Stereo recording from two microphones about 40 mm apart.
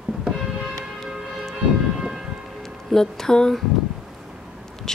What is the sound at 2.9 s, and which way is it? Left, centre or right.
Speech, centre.